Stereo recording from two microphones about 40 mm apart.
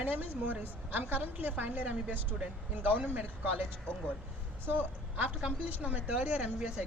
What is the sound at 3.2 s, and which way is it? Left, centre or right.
A woman's voice, right.